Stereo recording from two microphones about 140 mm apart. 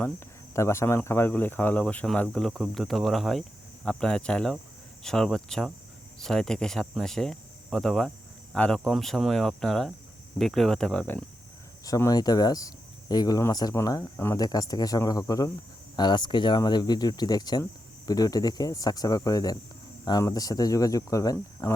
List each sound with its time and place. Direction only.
0.5 s speech: 20° left (ahead or behind)
11.9 s speech: 25° left (ahead or behind)